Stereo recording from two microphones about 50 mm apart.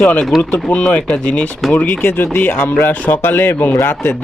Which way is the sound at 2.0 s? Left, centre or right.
Left.